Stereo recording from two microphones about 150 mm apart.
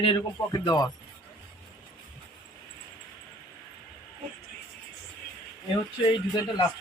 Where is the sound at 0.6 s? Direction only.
25° left (ahead or behind).